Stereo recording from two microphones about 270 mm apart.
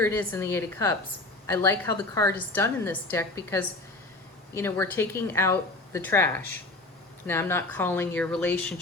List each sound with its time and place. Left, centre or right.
0.0 s a woman's voice: centre